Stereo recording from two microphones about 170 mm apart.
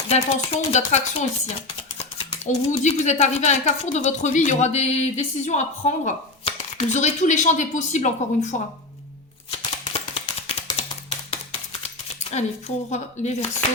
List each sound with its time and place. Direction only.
0.1 s speech: 40° left (ahead or behind)
9.5 s a sound: 35° left (ahead or behind)
12.2 s speech: 40° left (ahead or behind)